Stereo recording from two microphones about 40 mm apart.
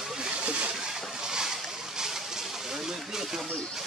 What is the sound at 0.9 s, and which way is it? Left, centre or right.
Boat, centre.